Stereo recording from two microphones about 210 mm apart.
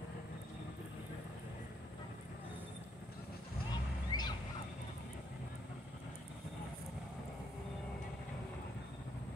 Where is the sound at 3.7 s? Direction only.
20° left (ahead or behind).